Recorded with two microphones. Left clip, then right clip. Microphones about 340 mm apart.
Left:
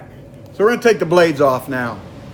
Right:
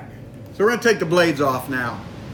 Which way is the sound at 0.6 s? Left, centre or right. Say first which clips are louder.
Left 4 dB; left.